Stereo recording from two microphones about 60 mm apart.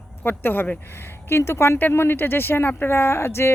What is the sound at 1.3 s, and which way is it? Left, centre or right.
Speech, left.